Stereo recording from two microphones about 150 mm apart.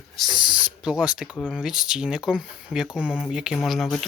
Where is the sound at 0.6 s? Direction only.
5° right (ahead or behind).